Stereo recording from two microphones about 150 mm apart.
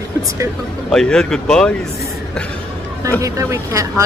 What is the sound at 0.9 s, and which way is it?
Speech, 5° left (ahead or behind).